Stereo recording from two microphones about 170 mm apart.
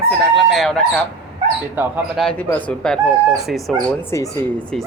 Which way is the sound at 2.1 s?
5° left (ahead or behind).